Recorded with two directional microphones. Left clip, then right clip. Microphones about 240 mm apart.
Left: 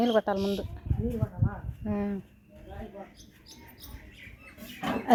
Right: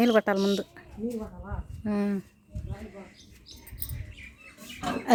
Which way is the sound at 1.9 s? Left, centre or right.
Right.